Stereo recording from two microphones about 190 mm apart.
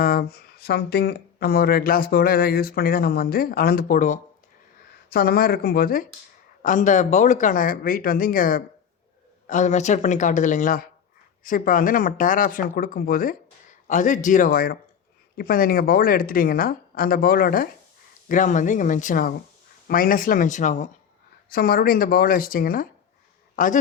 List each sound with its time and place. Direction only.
0.0 s speech: 50° left (ahead or behind)
5.0 s speech: 55° left (ahead or behind)
21.5 s speech: 50° left (ahead or behind)